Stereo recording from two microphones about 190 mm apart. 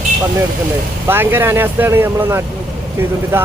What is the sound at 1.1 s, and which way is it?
Speech, 10° right (ahead or behind).